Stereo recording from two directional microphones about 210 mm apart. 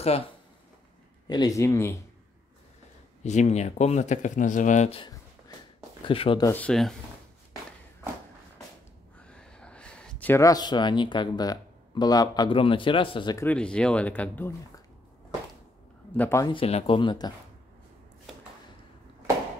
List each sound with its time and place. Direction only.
0.0 s speech: 30° left (ahead or behind); by 2.0 s 15° left (ahead or behind)
3.3 s speech: 35° left (ahead or behind)
6.5 s speech: 5° left (ahead or behind)
9.2 s speech: 5° left (ahead or behind); by 13.5 s 20° left (ahead or behind)
13.5 s speech: 5° left (ahead or behind)
16.2 s speech: 15° left (ahead or behind)
16.5 s speech: 25° left (ahead or behind)